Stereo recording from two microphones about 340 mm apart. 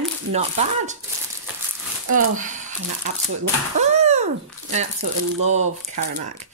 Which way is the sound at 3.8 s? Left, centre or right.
Centre.